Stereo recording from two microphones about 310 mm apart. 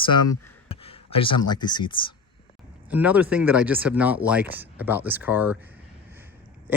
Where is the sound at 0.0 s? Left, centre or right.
Centre.